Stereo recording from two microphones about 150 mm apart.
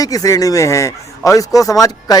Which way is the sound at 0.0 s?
25° left (ahead or behind).